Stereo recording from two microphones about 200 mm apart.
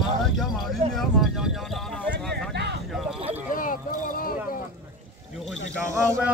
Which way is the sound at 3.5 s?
45° left (ahead or behind).